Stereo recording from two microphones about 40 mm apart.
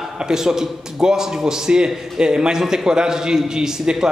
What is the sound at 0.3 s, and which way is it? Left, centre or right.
A man's voice, centre.